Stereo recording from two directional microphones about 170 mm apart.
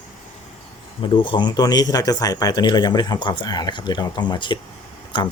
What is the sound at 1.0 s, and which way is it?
Speech, 30° left (ahead or behind).